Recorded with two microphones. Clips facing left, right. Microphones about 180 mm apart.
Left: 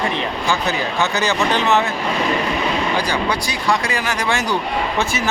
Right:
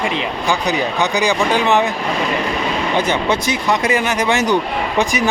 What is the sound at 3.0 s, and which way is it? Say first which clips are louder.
A man's voice: right 3 dB; 25° right (ahead or behind).